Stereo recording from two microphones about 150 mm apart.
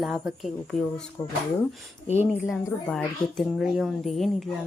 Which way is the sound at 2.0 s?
50° left (ahead or behind).